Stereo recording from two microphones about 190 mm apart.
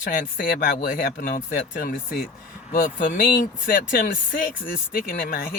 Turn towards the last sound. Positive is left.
turn(degrees=50)  # may be behind; listen again after turning